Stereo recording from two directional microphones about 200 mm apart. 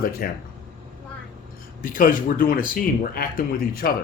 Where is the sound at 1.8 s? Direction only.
45° left (ahead or behind).